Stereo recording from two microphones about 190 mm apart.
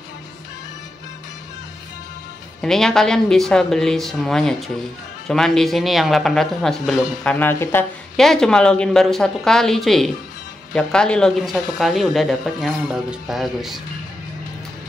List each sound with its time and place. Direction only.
2.6 s speech: 5° left (ahead or behind)